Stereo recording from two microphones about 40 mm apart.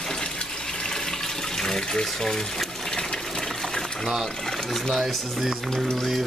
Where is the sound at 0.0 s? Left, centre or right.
Centre.